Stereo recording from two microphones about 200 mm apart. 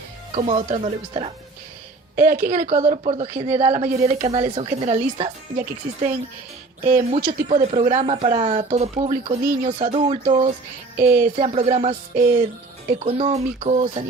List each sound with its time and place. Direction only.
0.3 s speech: 35° right (ahead or behind)
2.1 s a woman's voice: 45° right (ahead or behind)
9.4 s a woman's voice: 45° right (ahead or behind)
9.7 s speech: 30° right (ahead or behind)